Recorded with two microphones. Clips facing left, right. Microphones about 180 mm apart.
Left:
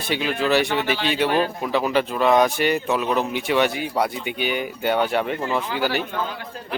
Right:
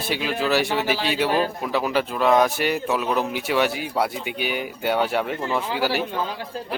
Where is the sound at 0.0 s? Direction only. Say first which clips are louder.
Left 1 dB; 5° right (ahead or behind).